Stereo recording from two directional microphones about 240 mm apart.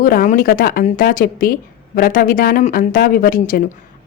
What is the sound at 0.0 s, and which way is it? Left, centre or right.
Speech, left.